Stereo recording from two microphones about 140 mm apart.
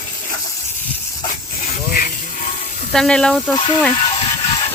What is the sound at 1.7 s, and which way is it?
Snake, 90° left.